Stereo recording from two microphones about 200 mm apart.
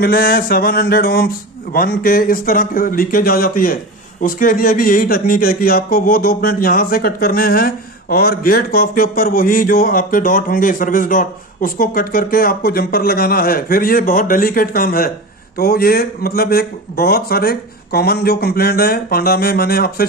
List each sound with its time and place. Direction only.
0.0 s a man's voice: 50° left (ahead or behind)